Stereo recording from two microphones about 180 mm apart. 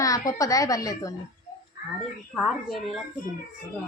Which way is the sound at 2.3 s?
Centre (ahead or behind).